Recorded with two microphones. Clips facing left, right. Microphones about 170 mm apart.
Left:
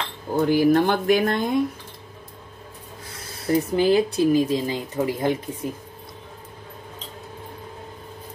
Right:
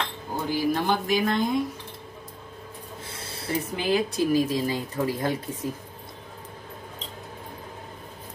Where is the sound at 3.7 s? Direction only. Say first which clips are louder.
Left 5 dB; 25° left (ahead or behind).